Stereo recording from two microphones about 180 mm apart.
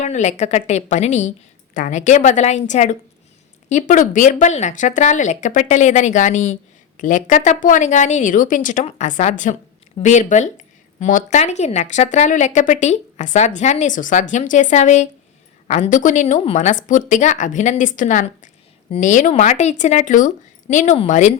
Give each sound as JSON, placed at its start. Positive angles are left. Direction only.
{"t": 0.0, "sound": "speech", "side_deg": 40}